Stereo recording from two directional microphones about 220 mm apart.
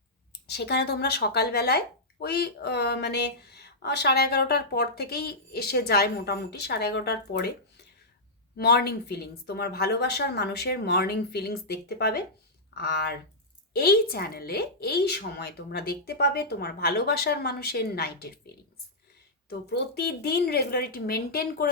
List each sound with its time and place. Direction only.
0.4 s speech: 50° left (ahead or behind)
19.5 s speech: 50° left (ahead or behind)